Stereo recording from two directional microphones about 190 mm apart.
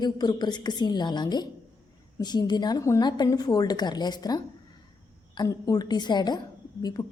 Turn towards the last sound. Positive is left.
turn(degrees=20)  # may be behind; listen again after turning